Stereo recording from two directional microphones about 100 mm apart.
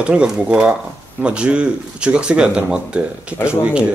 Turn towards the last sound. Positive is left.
turn(degrees=-10)  # may be behind; listen again after turning